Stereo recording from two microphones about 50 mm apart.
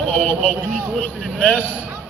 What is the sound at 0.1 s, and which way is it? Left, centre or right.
Speech, left.